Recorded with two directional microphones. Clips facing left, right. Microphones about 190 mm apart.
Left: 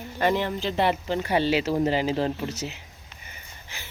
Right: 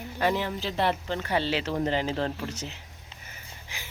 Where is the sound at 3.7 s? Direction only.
15° right (ahead or behind).